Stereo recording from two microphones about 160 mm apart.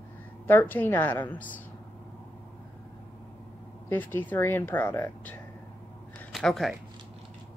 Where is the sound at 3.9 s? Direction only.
10° left (ahead or behind).